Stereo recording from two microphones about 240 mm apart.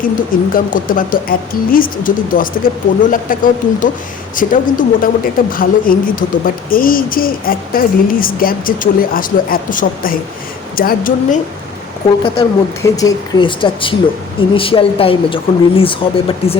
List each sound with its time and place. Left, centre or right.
0.0 s speech: left
12.2 s speech: centre